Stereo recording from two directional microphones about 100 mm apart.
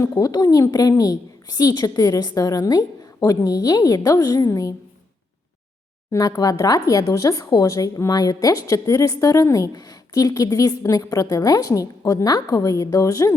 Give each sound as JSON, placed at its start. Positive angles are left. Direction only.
{"t": 0.0, "sound": "speech", "side_deg": 35}
{"t": 6.1, "sound": "speech", "side_deg": 35}